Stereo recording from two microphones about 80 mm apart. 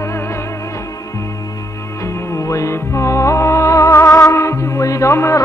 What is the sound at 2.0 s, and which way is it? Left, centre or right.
Music, left.